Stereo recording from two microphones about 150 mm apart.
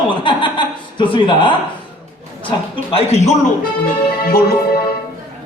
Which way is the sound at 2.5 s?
45° left (ahead or behind).